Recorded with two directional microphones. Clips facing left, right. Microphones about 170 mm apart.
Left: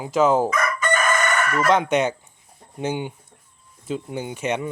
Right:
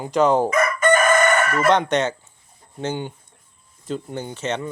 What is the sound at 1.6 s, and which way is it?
Speech, 5° left (ahead or behind).